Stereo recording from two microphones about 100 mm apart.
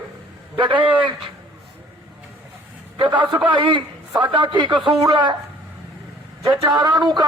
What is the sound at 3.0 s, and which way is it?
A man's voice, 55° right (ahead or behind).